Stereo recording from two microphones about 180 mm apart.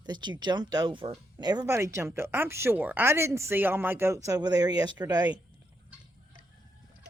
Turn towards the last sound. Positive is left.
turn(degrees=-20)  # may be behind; listen again after turning